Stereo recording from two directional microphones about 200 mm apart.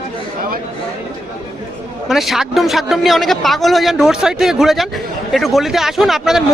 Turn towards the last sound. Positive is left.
turn(degrees=0)  # may be behind; listen again after turning